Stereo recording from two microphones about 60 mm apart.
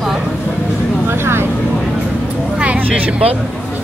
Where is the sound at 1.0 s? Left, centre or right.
Right.